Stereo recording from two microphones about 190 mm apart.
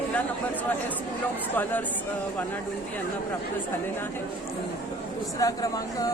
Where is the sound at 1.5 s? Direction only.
10° left (ahead or behind).